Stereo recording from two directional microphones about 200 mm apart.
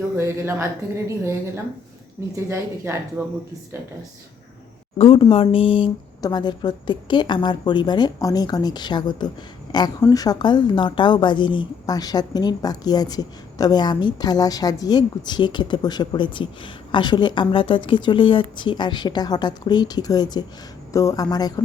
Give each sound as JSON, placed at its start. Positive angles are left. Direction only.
{"t": 0.2, "sound": "speech", "side_deg": -15}
{"t": 4.9, "sound": "a woman's voice", "side_deg": 30}